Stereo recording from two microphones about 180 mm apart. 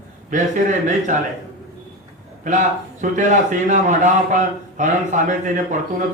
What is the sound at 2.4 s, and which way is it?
A man's voice, 45° right (ahead or behind).